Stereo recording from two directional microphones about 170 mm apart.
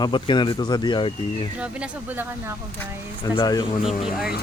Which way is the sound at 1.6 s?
10° right (ahead or behind).